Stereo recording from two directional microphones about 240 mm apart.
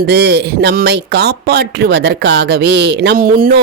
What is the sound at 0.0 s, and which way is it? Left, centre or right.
Speech, right.